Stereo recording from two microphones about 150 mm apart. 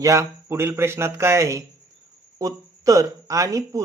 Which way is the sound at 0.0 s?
20° right (ahead or behind).